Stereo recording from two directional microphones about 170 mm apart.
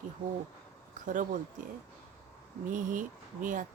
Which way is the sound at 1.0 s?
50° right (ahead or behind).